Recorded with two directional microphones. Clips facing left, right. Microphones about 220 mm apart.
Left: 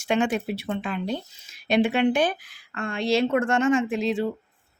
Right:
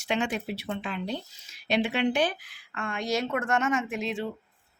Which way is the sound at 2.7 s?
35° left (ahead or behind).